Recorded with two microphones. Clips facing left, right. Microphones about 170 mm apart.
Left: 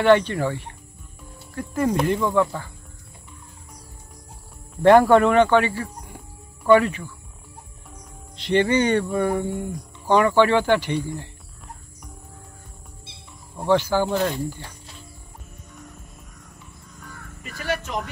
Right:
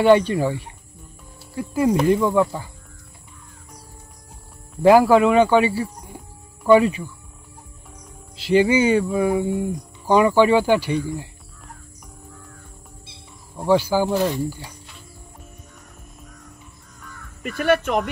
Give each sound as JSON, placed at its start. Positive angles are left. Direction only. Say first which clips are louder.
{"t": 0.0, "sound": "music", "louder": "right 2 dB", "side_deg": -10}
{"t": 1.5, "sound": "speech", "louder": "right 3 dB", "side_deg": -10}
{"t": 2.0, "sound": "music", "louder": "right 3 dB", "side_deg": -15}
{"t": 4.8, "sound": "music", "louder": "right 1 dB", "side_deg": -5}
{"t": 8.4, "sound": "music", "louder": "right 3 dB", "side_deg": -5}
{"t": 13.7, "sound": "music", "louder": "right 2 dB", "side_deg": -10}
{"t": 17.4, "sound": "speech", "louder": "right 9 dB", "side_deg": -60}